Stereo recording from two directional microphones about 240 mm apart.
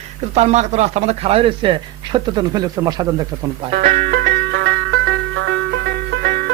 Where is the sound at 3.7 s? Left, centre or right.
Right.